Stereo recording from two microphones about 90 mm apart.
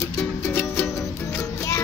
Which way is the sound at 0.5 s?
25° left (ahead or behind).